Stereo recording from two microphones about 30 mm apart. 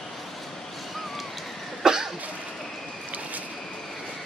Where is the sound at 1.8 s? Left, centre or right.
Right.